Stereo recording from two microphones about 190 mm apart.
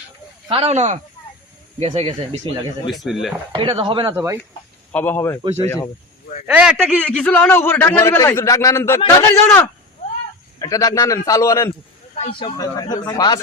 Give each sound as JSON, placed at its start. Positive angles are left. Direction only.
{"t": 0.4, "sound": "speech", "side_deg": -30}
{"t": 3.0, "sound": "speech", "side_deg": 0}
{"t": 3.5, "sound": "speech", "side_deg": -25}
{"t": 4.9, "sound": "a man's voice", "side_deg": 10}
{"t": 6.5, "sound": "a man's voice", "side_deg": -5}
{"t": 12.1, "sound": "speech", "side_deg": 30}